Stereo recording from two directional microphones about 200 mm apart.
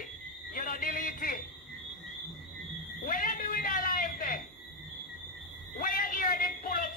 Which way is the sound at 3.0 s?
45° left (ahead or behind).